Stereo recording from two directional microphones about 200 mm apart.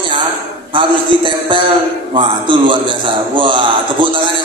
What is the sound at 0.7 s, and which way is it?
Music, 25° right (ahead or behind).